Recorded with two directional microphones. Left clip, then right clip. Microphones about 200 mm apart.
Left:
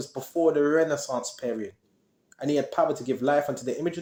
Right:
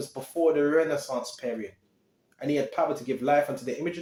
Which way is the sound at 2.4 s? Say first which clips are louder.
Left 2 dB; 45° left (ahead or behind).